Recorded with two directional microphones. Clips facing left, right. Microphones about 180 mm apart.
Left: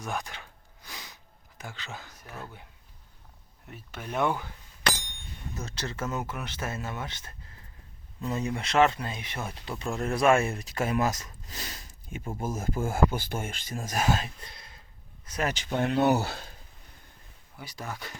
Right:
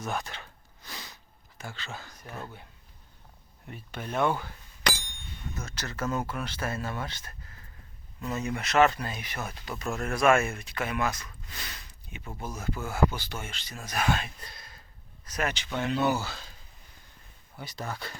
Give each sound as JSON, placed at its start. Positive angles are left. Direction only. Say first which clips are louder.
{"t": 0.0, "sound": "a sound", "louder": "right 1 dB", "side_deg": 15}
{"t": 3.7, "sound": "speech", "louder": "right 1 dB", "side_deg": 5}
{"t": 5.5, "sound": "speech", "louder": "left 1 dB", "side_deg": 30}
{"t": 8.4, "sound": "speech", "louder": "even", "side_deg": 30}
{"t": 9.9, "sound": "speech", "louder": "left 2 dB", "side_deg": 15}
{"t": 10.3, "sound": "speech", "louder": "left 1 dB", "side_deg": 35}
{"t": 14.4, "sound": "a sound", "louder": "even", "side_deg": 25}
{"t": 15.2, "sound": "speech", "louder": "left 1 dB", "side_deg": 30}
{"t": 15.5, "sound": "speech", "louder": "left 3 dB", "side_deg": 45}
{"t": 17.6, "sound": "speech", "louder": "right 2 dB", "side_deg": 10}